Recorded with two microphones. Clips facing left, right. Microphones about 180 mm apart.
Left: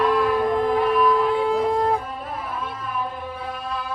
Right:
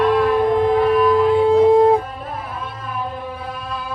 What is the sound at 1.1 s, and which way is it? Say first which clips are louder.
Shofar: right 6 dB; 25° right (ahead or behind).